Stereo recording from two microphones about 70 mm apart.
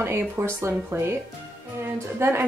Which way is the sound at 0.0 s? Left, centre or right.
Right.